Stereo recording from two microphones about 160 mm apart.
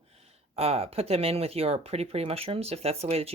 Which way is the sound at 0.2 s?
40° right (ahead or behind).